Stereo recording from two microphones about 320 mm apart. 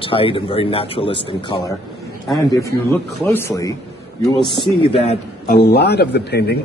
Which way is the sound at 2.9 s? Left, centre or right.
Centre.